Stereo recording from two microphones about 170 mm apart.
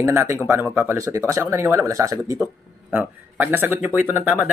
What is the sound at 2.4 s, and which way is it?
Speech, 10° right (ahead or behind).